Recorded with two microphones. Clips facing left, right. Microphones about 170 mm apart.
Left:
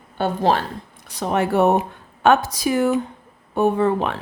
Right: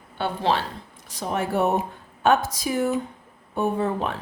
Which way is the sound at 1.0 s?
70° left (ahead or behind).